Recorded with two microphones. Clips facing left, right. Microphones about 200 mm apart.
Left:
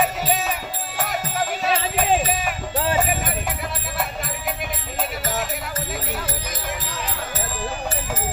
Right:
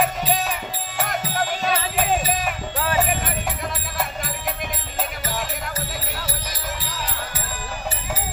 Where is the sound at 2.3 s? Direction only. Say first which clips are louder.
Even; 5° left (ahead or behind).